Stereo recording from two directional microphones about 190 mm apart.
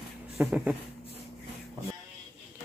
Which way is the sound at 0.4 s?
5° right (ahead or behind).